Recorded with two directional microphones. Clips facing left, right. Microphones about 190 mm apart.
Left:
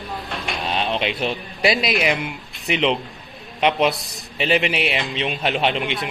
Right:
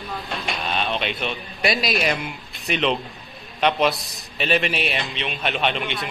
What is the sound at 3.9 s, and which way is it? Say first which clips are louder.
Speech: left 1 dB; centre (ahead or behind).